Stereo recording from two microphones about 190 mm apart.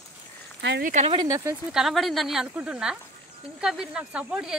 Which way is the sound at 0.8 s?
40° right (ahead or behind).